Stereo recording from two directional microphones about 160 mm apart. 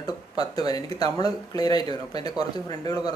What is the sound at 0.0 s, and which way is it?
A man's voice, 25° left (ahead or behind).